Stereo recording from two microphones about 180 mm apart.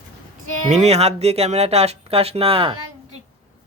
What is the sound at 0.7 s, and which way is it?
Speech, 35° right (ahead or behind).